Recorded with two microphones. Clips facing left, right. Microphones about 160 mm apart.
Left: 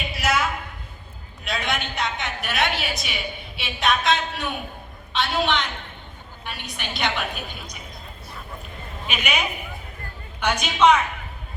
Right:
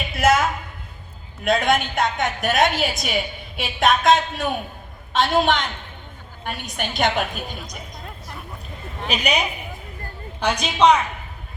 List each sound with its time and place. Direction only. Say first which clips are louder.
0.1 s a sound: right 7 dB; 50° right (ahead or behind)
1.5 s a woman's voice: right 8 dB; 45° right (ahead or behind)
9.0 s a woman's voice: right 4 dB; 35° right (ahead or behind)
10.4 s a woman's voice: right 1 dB; 35° right (ahead or behind)